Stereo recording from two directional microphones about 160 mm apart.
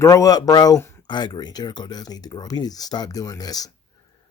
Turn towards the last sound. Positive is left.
turn(degrees=25)  # may be behind; listen again after turning